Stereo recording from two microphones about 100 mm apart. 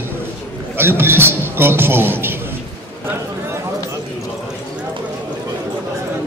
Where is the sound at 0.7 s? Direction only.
25° right (ahead or behind).